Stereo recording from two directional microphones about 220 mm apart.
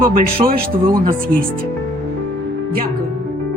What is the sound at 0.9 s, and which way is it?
Speech, 15° right (ahead or behind).